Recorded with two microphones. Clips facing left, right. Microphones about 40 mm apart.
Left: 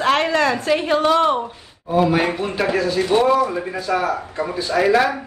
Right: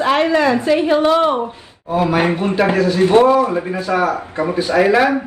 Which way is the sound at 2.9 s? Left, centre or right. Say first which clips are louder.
Right 7 dB; right.